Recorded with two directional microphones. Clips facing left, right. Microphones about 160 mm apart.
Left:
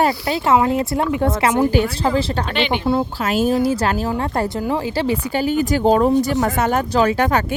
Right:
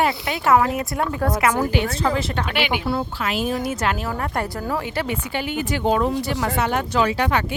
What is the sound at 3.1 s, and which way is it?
Speech, 40° left (ahead or behind).